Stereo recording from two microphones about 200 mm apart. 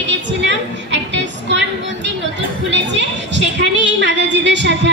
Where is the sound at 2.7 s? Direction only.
65° right (ahead or behind).